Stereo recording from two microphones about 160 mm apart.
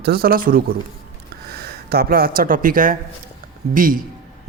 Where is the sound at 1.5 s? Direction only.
75° right (ahead or behind).